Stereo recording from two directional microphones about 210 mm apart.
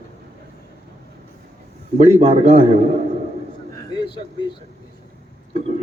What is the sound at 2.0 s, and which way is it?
Speech, 30° right (ahead or behind).